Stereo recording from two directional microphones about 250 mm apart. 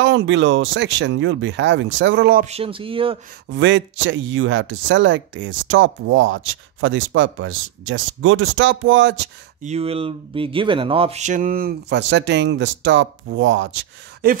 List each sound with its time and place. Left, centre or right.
0.0 s speech: right
2.4 s speech: right
3.4 s speech: right
9.6 s speech: right